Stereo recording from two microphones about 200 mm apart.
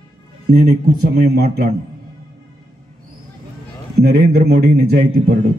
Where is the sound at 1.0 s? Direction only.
50° right (ahead or behind).